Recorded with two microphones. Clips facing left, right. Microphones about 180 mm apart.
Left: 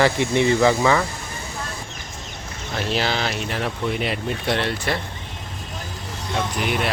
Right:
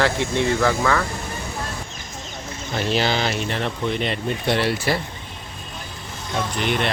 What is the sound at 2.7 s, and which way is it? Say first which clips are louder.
Speech: right 2 dB; centre (ahead or behind).